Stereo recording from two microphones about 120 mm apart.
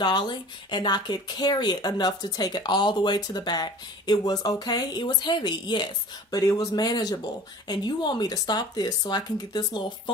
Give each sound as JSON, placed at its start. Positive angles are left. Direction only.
{"t": 0.0, "sound": "speech", "side_deg": 40}
{"t": 6.3, "sound": "speech", "side_deg": 30}